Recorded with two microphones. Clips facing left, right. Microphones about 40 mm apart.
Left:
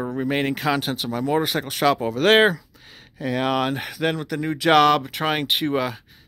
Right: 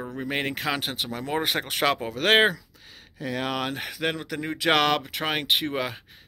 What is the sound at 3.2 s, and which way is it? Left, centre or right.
Speech, left.